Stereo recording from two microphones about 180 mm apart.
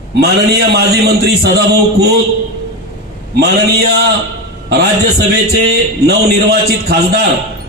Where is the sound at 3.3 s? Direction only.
65° right (ahead or behind).